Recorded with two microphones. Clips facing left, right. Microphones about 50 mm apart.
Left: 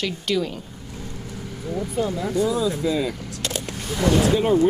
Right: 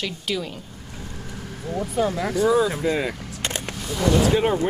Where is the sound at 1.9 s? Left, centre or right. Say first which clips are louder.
Right 1 dB; right.